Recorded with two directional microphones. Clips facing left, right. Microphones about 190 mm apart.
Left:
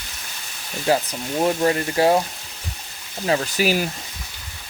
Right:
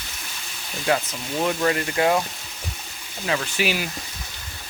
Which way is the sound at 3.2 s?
35° left (ahead or behind).